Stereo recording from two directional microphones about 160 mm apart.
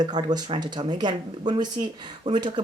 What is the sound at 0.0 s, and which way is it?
Speech, 25° right (ahead or behind).